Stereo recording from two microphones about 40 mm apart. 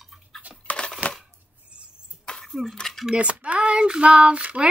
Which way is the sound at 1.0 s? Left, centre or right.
Right.